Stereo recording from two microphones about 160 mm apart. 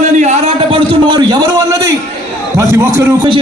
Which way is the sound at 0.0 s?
45° right (ahead or behind).